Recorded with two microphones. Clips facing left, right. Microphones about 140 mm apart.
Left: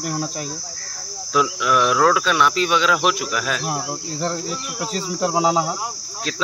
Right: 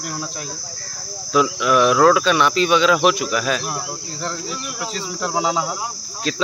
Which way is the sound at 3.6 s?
30° left (ahead or behind).